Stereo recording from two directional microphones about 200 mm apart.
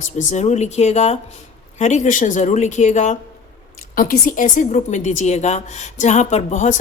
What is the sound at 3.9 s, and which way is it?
A woman's voice, 45° left (ahead or behind).